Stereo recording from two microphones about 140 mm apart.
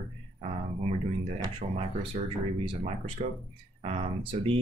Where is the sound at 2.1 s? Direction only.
55° right (ahead or behind).